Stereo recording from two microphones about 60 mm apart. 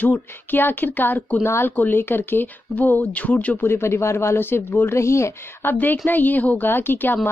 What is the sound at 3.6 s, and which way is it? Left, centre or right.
A woman's voice, left.